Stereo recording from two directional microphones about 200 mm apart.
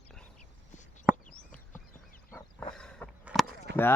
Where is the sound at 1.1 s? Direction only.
10° right (ahead or behind).